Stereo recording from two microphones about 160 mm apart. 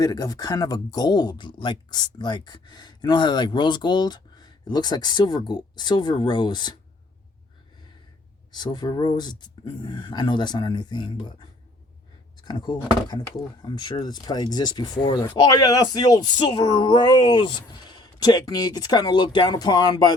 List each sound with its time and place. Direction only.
0.0 s speech: 25° left (ahead or behind)
8.5 s speech: 25° left (ahead or behind)
12.5 s speech: 25° left (ahead or behind)